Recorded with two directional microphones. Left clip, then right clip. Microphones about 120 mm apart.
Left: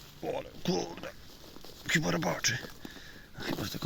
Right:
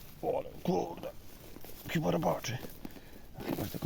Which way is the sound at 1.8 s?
35° right (ahead or behind).